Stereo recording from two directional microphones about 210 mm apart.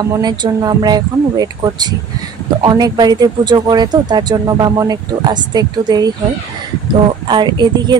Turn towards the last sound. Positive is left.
turn(degrees=-20)  # may be behind; listen again after turning